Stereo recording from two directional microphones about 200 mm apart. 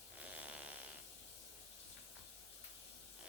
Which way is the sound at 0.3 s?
5° right (ahead or behind).